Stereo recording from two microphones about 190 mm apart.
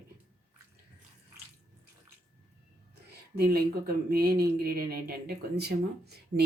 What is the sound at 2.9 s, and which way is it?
Speech, 55° right (ahead or behind).